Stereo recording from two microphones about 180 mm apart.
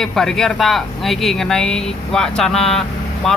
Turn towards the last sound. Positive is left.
turn(degrees=0)  # may be behind; listen again after turning